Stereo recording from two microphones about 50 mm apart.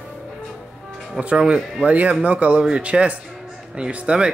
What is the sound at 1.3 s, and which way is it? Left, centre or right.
Speech, centre.